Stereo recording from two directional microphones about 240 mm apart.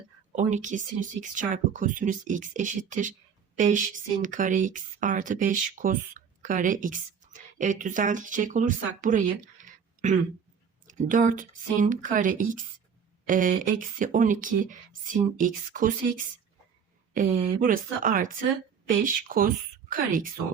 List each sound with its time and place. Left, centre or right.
0.3 s speech: right